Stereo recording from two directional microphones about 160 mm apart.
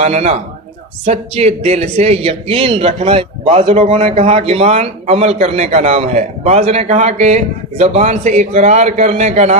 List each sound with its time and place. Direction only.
0.0 s a man's voice: 45° right (ahead or behind)